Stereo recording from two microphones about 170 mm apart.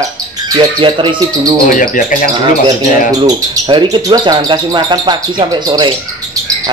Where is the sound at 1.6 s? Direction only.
50° left (ahead or behind).